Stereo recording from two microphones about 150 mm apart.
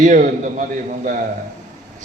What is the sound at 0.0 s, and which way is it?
Speech, 60° right (ahead or behind).